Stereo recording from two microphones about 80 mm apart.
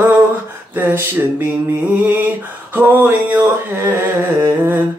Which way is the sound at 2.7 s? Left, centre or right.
Right.